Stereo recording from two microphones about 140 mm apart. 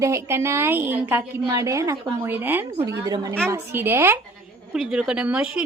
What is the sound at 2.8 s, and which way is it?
Speech, 25° right (ahead or behind).